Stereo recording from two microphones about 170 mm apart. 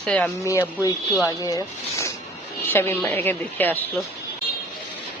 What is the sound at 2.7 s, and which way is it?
A woman's voice, 15° left (ahead or behind).